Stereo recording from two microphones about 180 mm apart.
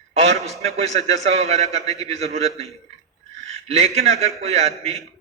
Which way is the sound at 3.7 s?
35° right (ahead or behind).